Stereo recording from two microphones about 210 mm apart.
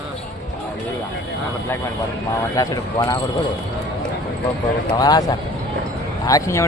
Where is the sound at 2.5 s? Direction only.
15° left (ahead or behind).